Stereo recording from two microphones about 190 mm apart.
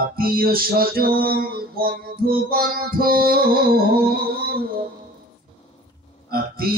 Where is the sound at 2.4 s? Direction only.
50° right (ahead or behind).